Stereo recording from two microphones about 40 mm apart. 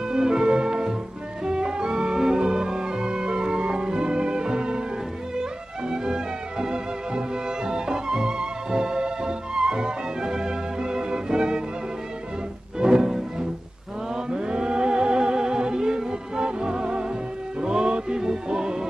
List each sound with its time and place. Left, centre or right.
0.1 s music: centre
12.7 s music: centre